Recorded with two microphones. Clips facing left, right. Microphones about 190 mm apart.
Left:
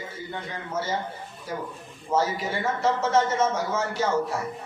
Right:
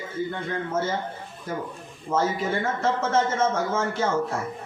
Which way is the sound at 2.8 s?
50° right (ahead or behind).